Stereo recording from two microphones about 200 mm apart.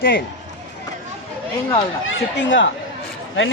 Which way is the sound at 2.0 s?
70° left (ahead or behind).